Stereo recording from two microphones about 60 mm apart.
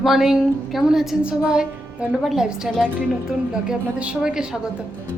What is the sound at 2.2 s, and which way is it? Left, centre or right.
A woman's voice, centre.